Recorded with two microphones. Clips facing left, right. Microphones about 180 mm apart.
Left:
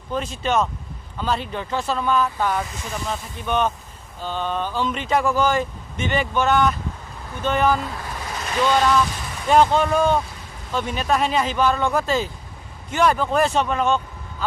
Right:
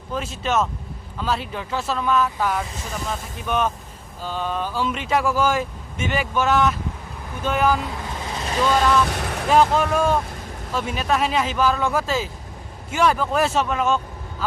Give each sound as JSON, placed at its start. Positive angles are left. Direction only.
{"t": 0.1, "sound": "speech", "side_deg": 0}
{"t": 8.3, "sound": "vehicle", "side_deg": -25}
{"t": 9.1, "sound": "vehicle", "side_deg": -70}
{"t": 9.5, "sound": "speech", "side_deg": -5}